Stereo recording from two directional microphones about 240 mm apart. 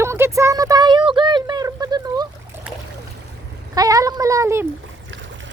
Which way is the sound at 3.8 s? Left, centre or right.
Centre.